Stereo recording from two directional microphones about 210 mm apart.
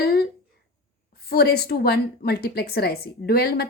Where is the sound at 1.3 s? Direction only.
50° left (ahead or behind).